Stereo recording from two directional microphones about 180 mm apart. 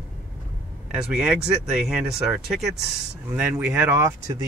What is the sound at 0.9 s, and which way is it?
Speech, centre (ahead or behind).